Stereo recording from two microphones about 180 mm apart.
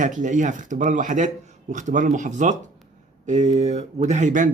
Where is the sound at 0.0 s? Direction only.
45° right (ahead or behind).